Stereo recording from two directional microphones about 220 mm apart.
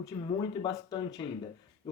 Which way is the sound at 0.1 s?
20° left (ahead or behind).